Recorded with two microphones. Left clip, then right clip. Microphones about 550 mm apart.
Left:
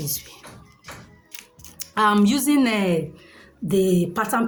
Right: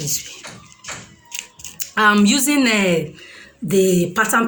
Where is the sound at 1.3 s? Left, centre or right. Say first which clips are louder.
Right 9 dB; left.